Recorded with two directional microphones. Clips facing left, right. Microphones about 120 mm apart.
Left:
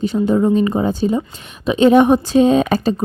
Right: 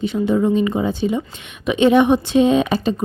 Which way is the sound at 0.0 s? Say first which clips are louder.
Left 2 dB; 40° left (ahead or behind).